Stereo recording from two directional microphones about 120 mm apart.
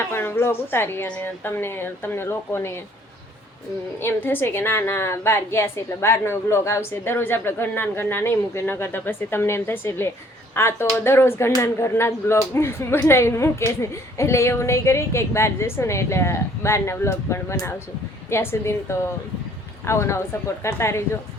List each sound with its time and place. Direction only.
0.1 s speech: 20° left (ahead or behind)
4.0 s speech: 15° left (ahead or behind)